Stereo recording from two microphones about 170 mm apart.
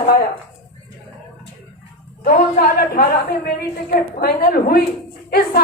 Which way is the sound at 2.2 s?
60° left (ahead or behind).